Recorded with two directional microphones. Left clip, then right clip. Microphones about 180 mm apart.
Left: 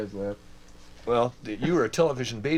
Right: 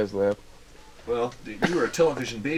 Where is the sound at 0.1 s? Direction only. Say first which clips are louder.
Right 10 dB; 35° right (ahead or behind).